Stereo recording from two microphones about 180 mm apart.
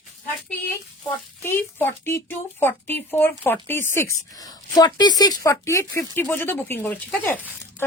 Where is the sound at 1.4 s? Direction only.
10° left (ahead or behind).